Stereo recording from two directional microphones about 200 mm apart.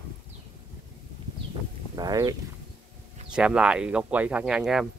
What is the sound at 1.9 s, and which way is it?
Speech, 20° right (ahead or behind).